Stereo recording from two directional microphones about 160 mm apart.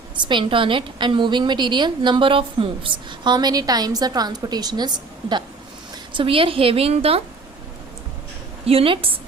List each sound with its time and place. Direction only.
0.2 s a woman's voice: 30° right (ahead or behind)
6.1 s a woman's voice: 35° right (ahead or behind)
8.6 s a woman's voice: 35° right (ahead or behind)